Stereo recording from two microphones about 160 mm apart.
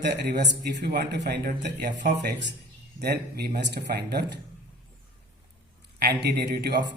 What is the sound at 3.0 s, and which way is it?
Speech, 80° right.